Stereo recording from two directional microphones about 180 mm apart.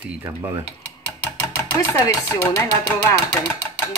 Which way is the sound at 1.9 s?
20° left (ahead or behind).